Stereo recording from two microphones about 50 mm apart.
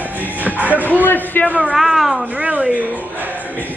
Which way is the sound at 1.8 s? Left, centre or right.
Centre.